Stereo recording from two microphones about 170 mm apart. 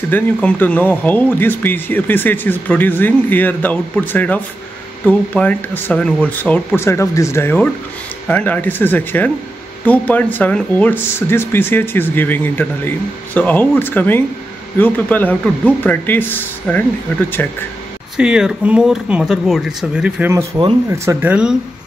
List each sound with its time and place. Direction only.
0.1 s speech: 10° left (ahead or behind)
18.1 s speech: 5° right (ahead or behind)